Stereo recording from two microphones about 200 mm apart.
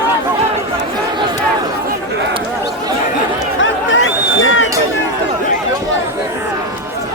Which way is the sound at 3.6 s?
70° left (ahead or behind).